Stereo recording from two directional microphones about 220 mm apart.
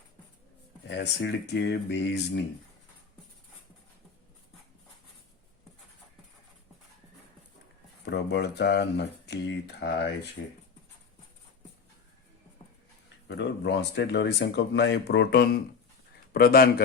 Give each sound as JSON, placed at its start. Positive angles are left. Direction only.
{"t": 0.9, "sound": "speech", "side_deg": 50}
{"t": 8.0, "sound": "speech", "side_deg": 50}
{"t": 13.2, "sound": "speech", "side_deg": 50}